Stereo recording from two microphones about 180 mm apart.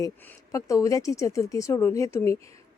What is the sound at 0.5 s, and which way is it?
Speech, 20° left (ahead or behind).